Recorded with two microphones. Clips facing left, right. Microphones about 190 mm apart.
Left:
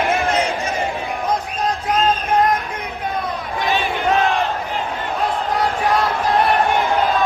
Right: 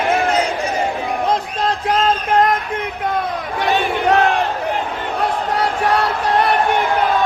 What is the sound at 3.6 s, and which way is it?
Crowd, 65° right (ahead or behind).